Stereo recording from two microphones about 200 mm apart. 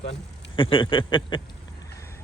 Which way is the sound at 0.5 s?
25° left (ahead or behind).